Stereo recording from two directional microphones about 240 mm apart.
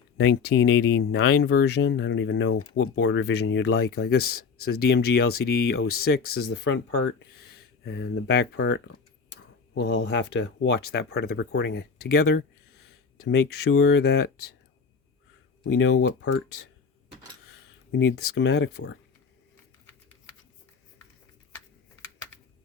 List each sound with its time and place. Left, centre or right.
0.2 s speech: left
15.6 s speech: left
17.9 s speech: left